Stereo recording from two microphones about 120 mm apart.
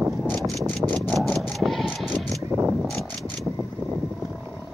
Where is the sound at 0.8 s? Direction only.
25° right (ahead or behind).